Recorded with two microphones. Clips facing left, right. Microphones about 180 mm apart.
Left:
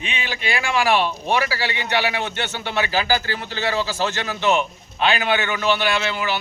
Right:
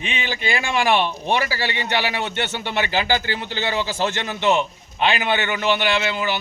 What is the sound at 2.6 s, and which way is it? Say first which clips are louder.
A man's voice: left 2 dB; 20° right (ahead or behind).